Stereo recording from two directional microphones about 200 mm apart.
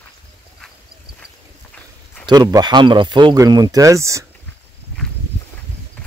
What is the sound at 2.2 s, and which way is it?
Speech, 20° right (ahead or behind).